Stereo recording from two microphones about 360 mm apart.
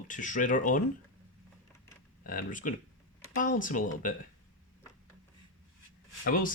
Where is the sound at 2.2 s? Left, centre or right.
Left.